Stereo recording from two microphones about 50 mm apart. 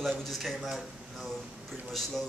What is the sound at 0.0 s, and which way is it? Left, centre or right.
Speech, centre.